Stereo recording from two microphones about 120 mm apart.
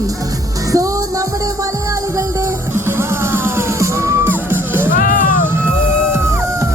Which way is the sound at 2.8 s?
20° right (ahead or behind).